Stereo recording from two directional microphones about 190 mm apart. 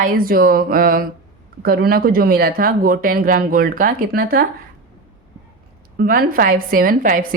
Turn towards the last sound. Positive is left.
turn(degrees=-45)  # may be behind; listen again after turning